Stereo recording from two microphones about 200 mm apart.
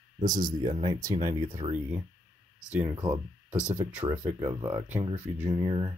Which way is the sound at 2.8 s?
20° right (ahead or behind).